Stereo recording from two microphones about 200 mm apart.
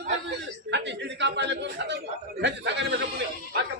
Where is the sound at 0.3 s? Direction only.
60° right (ahead or behind).